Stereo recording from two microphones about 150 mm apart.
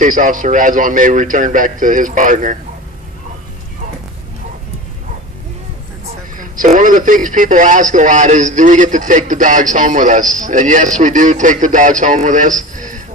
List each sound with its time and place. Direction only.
0.0 s speech: 60° right (ahead or behind)
6.3 s speech: 65° right (ahead or behind)